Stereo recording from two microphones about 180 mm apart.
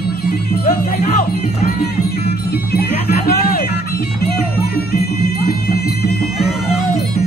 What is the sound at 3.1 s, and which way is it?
Music, 60° left (ahead or behind).